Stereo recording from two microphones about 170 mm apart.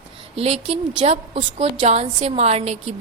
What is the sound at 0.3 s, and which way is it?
A woman's voice, 35° right (ahead or behind).